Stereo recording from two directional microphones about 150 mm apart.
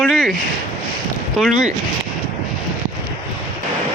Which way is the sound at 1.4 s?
Centre (ahead or behind).